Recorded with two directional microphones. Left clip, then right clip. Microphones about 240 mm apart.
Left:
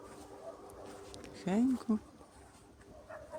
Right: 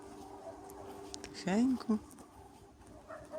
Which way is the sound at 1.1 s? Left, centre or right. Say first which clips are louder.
Right 1 dB; centre.